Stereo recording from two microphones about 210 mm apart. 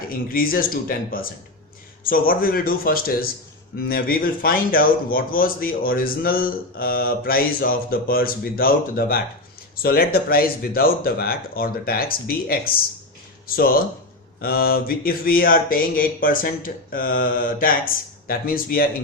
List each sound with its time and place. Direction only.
0.1 s a man's voice: 45° left (ahead or behind)
14.4 s a man's voice: 45° left (ahead or behind)